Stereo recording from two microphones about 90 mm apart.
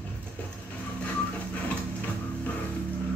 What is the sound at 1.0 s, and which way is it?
Printer, 15° left (ahead or behind).